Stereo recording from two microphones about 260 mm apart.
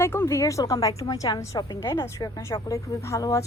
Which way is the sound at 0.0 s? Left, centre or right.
Centre.